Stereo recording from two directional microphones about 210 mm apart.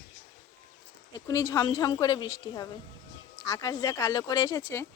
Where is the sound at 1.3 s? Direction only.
15° left (ahead or behind).